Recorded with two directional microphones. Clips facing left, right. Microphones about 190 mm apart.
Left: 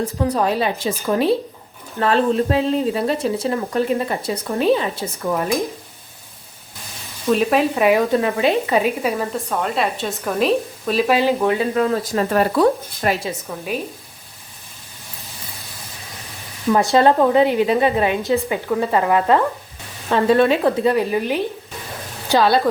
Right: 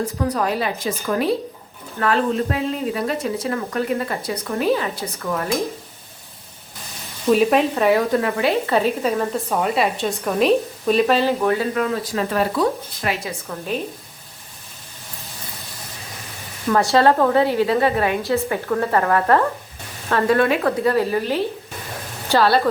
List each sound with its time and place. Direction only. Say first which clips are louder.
0.3 s speech: left 3 dB; 25° left (ahead or behind)
7.3 s speech: right 1 dB; centre (ahead or behind)
7.8 s speech: left 1 dB; 15° left (ahead or behind)
11.8 s speech: left 3 dB; 30° left (ahead or behind)
12.3 s speech: left 5 dB; 45° left (ahead or behind)
13.5 s speech: left 1 dB; 10° left (ahead or behind)
16.6 s speech: left 1 dB; 15° left (ahead or behind)